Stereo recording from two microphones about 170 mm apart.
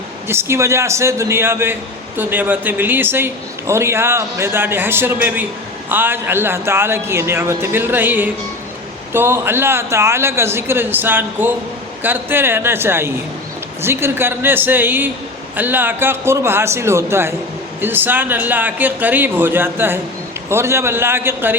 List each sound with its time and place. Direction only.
0.3 s a man's voice: 15° right (ahead or behind)